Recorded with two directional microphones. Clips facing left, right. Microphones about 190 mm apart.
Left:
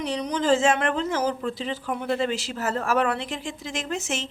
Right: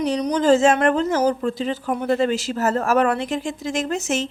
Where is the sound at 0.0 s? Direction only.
40° right (ahead or behind).